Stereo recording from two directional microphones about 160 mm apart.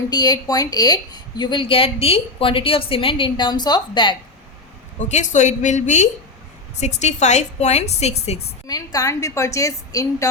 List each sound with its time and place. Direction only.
0.1 s a woman's voice: 25° left (ahead or behind)
4.9 s a woman's voice: 45° left (ahead or behind)
8.6 s a woman's voice: 20° left (ahead or behind)